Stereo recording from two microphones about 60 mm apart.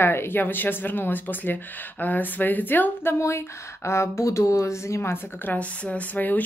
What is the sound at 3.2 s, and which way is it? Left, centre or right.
Speech, left.